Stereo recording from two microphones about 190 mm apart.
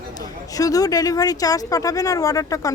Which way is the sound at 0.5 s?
20° left (ahead or behind).